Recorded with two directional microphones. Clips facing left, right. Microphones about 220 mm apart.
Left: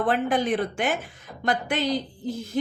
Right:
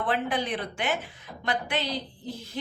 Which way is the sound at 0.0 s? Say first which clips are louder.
Left 5 dB; 45° left (ahead or behind).